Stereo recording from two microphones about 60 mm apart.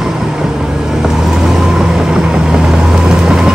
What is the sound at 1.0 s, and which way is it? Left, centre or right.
Vehicle, centre.